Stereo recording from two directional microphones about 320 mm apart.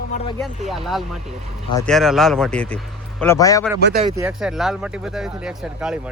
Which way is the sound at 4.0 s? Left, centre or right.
Centre.